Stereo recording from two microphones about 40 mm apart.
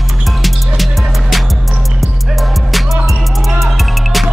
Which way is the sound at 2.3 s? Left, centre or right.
Centre.